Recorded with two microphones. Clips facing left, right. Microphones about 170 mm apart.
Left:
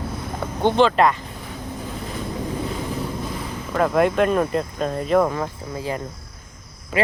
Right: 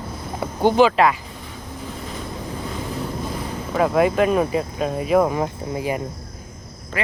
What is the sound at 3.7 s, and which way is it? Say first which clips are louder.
Speech: right 1 dB; 5° right (ahead or behind).